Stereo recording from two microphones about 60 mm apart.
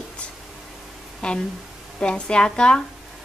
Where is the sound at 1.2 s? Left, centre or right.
Centre.